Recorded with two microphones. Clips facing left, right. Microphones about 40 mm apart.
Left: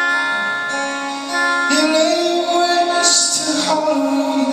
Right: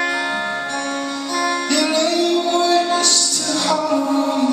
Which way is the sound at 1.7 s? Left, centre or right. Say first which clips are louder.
Left 3 dB; centre.